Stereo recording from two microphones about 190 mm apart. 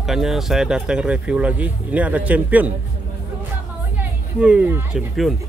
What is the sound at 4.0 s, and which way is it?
Speech, 5° right (ahead or behind).